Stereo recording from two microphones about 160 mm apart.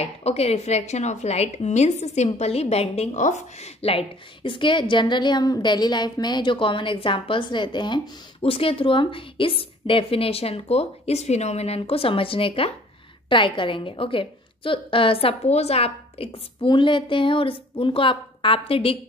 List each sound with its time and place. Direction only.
0.0 s a woman's voice: 40° left (ahead or behind)